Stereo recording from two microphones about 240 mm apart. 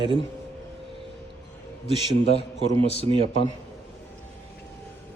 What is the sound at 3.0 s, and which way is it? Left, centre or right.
Speech, right.